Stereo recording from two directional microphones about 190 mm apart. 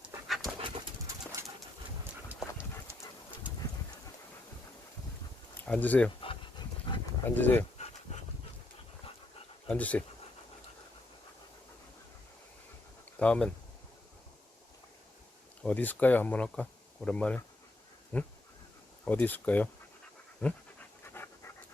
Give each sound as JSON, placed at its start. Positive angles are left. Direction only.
{"t": 0.0, "sound": "dog", "side_deg": -5}
{"t": 0.6, "sound": "dog", "side_deg": -15}
{"t": 5.5, "sound": "speech", "side_deg": 10}
{"t": 6.9, "sound": "dog", "side_deg": 25}
{"t": 7.3, "sound": "speech", "side_deg": 10}
{"t": 9.6, "sound": "speech", "side_deg": 5}
{"t": 13.1, "sound": "speech", "side_deg": 5}
{"t": 15.6, "sound": "speech", "side_deg": 10}
{"t": 20.4, "sound": "pant", "side_deg": 10}